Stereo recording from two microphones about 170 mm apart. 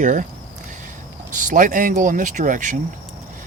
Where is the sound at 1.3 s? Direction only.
50° right (ahead or behind).